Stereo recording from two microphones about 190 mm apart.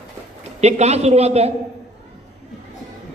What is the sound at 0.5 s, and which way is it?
Speech, 35° right (ahead or behind).